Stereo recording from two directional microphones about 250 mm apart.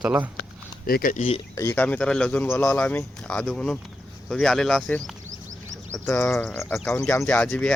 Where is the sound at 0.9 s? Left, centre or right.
Left.